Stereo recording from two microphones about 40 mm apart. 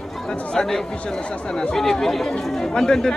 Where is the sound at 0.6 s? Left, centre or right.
Centre.